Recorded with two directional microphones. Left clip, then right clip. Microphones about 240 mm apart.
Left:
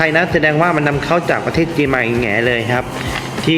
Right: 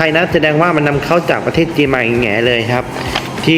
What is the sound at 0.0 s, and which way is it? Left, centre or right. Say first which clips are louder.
Speech: right 1 dB; centre.